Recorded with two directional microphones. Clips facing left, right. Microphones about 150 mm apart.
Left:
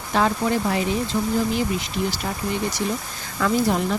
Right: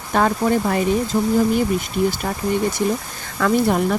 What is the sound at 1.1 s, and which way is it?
Speech, 40° right (ahead or behind).